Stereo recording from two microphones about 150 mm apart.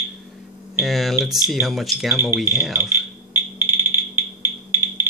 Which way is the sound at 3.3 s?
15° right (ahead or behind).